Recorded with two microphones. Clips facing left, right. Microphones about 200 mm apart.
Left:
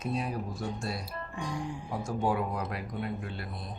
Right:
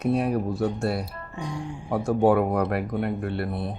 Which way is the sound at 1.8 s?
65° right (ahead or behind).